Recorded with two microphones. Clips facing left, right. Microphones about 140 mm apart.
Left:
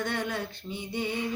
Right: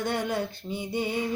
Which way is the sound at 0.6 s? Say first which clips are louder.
Right 4 dB; 25° right (ahead or behind).